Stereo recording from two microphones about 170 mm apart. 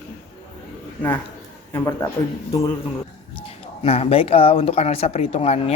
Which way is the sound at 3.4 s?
35° left (ahead or behind).